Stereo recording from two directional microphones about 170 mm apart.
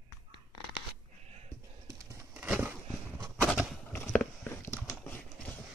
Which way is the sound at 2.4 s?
10° right (ahead or behind).